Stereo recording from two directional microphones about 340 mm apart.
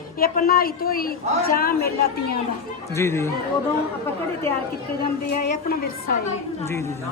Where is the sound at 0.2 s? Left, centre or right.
Left.